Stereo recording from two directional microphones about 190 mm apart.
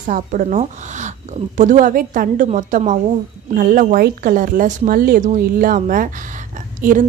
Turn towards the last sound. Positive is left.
turn(degrees=-45)  # may be behind; listen again after turning